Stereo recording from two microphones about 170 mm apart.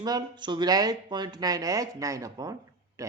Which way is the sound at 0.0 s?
25° right (ahead or behind).